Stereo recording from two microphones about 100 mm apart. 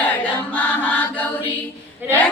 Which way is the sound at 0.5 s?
15° left (ahead or behind).